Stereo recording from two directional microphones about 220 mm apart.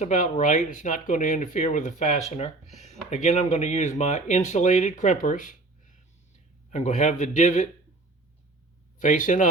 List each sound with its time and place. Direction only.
0.0 s speech: 35° left (ahead or behind)
9.0 s speech: 35° left (ahead or behind)